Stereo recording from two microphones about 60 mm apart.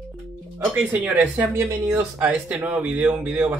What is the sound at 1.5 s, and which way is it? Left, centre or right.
Speech, right.